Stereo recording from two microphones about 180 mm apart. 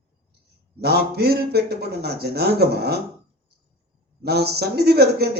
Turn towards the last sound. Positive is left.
turn(degrees=-65)  # may be behind; listen again after turning